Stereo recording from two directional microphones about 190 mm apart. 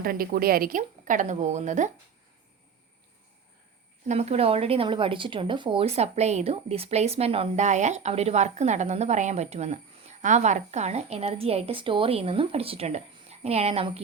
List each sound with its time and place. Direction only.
0.0 s a woman's voice: 50° right (ahead or behind)
4.0 s speech: 35° right (ahead or behind)